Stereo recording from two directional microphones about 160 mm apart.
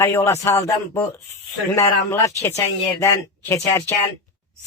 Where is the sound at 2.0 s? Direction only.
20° left (ahead or behind).